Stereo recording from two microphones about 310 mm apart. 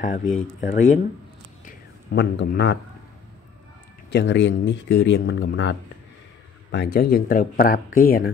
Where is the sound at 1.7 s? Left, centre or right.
Left.